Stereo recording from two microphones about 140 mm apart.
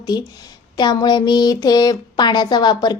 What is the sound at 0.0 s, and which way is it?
Speech, 30° left (ahead or behind).